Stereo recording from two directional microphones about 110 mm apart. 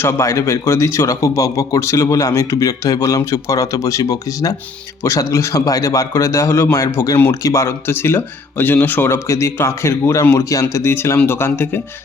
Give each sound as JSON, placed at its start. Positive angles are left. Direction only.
{"t": 0.0, "sound": "a man's voice", "side_deg": 25}